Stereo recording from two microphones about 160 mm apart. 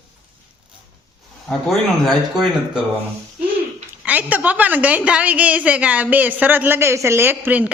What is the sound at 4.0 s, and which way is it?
A woman's voice, 10° right (ahead or behind).